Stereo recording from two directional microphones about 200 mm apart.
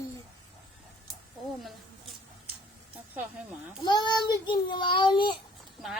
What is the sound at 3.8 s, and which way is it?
A child's voice, 20° left (ahead or behind).